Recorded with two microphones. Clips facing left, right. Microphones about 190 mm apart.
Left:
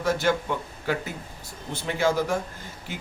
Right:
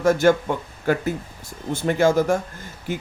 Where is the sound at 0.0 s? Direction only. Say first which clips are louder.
Right 7 dB; 45° right (ahead or behind).